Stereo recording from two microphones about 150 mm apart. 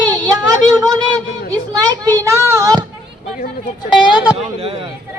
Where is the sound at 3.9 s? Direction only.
5° right (ahead or behind).